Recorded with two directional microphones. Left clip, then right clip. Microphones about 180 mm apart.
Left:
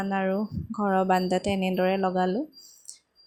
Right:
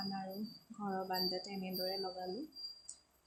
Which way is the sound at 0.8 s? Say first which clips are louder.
Left 15 dB; 40° left (ahead or behind).